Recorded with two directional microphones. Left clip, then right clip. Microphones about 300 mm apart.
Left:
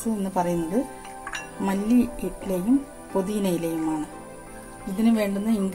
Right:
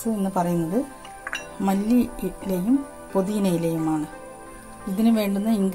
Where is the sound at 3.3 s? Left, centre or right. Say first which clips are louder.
Right 2 dB; right.